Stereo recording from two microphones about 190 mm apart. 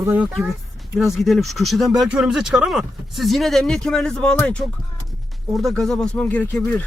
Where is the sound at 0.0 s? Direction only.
10° right (ahead or behind).